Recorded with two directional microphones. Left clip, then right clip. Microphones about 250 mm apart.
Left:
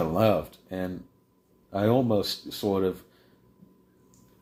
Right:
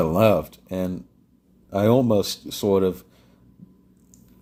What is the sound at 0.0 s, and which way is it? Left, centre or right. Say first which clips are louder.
Speech: right 5 dB; right.